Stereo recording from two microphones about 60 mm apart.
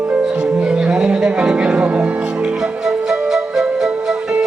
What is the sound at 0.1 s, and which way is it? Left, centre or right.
Music, centre.